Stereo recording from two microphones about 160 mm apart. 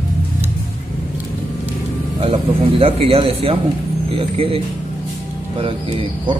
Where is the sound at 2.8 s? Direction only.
35° right (ahead or behind).